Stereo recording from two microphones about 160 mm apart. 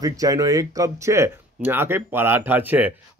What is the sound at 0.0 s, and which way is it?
Speech, 20° right (ahead or behind).